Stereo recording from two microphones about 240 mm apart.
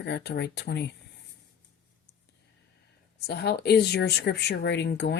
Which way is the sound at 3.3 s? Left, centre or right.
Left.